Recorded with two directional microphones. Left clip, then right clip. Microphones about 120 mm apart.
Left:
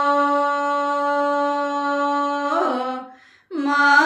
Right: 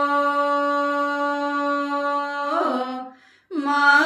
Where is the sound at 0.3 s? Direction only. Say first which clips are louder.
Left 1 dB; 40° right (ahead or behind).